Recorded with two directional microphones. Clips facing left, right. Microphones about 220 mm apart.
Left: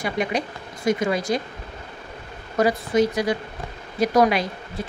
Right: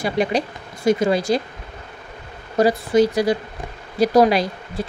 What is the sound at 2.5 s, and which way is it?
Speech, 35° right (ahead or behind).